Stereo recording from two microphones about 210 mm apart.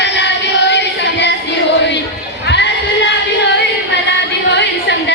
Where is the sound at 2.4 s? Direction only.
55° left (ahead or behind).